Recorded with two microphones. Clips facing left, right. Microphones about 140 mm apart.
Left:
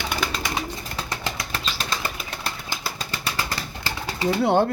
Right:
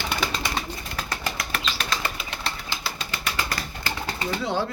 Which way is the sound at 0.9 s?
25° left (ahead or behind).